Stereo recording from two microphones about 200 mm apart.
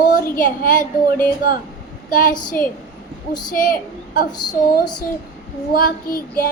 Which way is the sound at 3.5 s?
45° left (ahead or behind).